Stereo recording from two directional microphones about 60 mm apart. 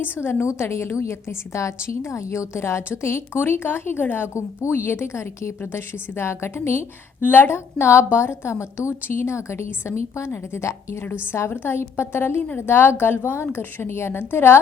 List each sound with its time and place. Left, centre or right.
0.0 s a woman's voice: left
0.4 s a woman's voice: left
7.2 s a woman's voice: left
11.0 s a woman's voice: left